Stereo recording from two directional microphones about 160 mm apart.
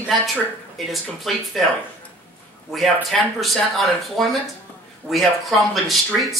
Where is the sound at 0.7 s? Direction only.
Centre (ahead or behind).